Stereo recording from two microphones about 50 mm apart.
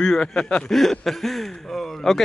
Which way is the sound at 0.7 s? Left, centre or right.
Centre.